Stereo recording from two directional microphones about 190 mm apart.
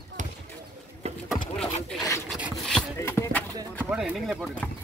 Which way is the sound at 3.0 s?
15° left (ahead or behind).